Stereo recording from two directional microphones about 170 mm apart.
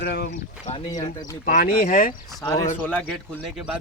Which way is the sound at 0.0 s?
75° left (ahead or behind).